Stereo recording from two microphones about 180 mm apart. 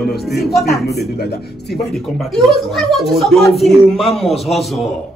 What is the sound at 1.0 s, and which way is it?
Speech, 60° left (ahead or behind).